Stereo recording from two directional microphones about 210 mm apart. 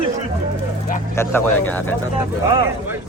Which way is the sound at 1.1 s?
10° left (ahead or behind).